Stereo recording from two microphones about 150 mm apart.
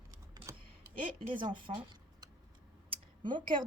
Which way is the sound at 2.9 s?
30° right (ahead or behind).